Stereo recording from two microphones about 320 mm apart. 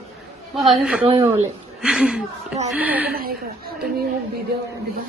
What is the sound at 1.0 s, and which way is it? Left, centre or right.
Speech, centre.